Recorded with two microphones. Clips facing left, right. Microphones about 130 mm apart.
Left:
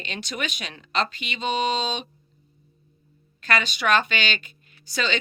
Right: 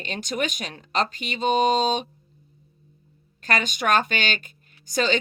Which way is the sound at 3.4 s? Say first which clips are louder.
Even; 45° right (ahead or behind).